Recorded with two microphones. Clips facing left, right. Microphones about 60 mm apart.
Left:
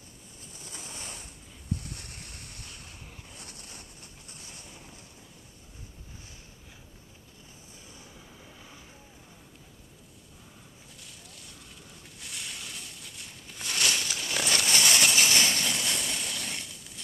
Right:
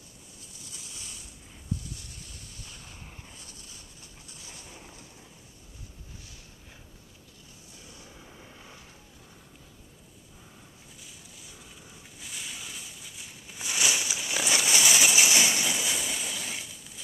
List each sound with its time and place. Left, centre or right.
0.4 s ocean: left
3.3 s wind noise: left
4.6 s boat: centre
7.8 s vehicle: left
8.1 s vehicle: centre
11.0 s a sound: centre